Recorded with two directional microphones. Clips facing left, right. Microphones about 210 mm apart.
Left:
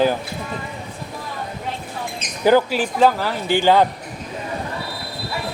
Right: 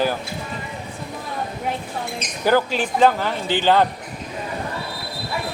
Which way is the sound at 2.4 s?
10° left (ahead or behind).